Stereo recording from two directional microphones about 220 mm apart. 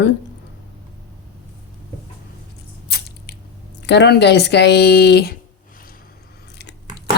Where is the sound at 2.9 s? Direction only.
45° left (ahead or behind).